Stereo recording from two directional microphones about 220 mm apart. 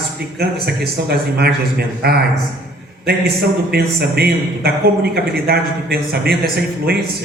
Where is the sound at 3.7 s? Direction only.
45° right (ahead or behind).